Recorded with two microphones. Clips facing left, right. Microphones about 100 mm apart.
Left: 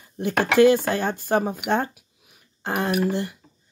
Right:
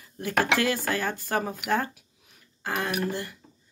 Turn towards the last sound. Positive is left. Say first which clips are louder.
# left 6 dB
turn(degrees=20)  # may be behind; listen again after turning